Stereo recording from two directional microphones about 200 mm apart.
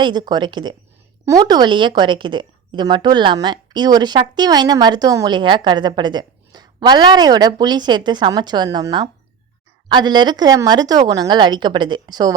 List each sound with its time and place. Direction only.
0.0 s a woman's voice: 20° right (ahead or behind)